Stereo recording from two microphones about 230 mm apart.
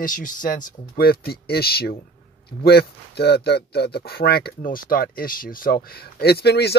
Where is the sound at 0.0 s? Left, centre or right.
Left.